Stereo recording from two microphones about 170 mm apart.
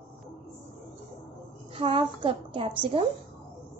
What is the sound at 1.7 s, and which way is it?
A woman's voice, 30° right (ahead or behind).